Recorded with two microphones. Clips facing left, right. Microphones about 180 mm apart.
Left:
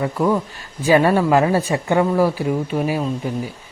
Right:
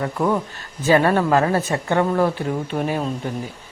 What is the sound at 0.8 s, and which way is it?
Speech, 15° left (ahead or behind).